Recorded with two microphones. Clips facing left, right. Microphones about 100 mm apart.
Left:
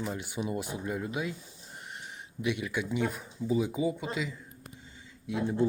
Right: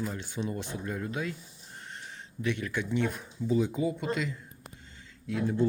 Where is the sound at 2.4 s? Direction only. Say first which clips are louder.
Even; 10° left (ahead or behind).